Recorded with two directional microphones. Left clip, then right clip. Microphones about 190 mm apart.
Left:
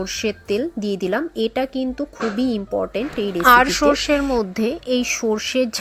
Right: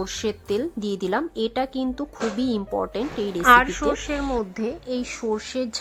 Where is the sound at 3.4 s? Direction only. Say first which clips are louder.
Left 3 dB; 35° left (ahead or behind).